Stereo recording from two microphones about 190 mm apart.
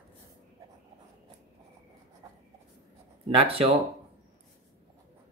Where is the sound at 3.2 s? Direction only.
30° right (ahead or behind).